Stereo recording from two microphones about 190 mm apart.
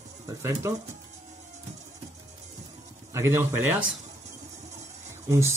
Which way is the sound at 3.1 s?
15° right (ahead or behind).